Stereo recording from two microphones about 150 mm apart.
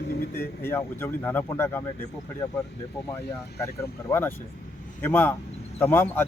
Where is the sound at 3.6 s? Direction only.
15° left (ahead or behind).